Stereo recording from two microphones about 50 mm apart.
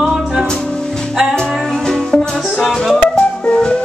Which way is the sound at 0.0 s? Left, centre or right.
Centre.